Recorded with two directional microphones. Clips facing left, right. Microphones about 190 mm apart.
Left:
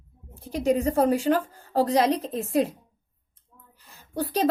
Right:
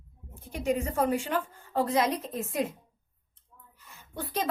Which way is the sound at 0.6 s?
35° left (ahead or behind).